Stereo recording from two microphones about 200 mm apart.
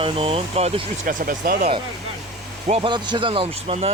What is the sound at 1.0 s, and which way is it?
Speech, 45° right (ahead or behind).